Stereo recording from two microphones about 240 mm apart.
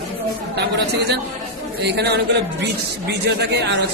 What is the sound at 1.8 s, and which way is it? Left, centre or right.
Speech, right.